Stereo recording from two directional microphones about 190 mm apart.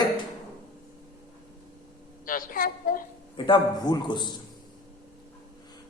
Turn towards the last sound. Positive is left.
turn(degrees=25)  # may be behind; listen again after turning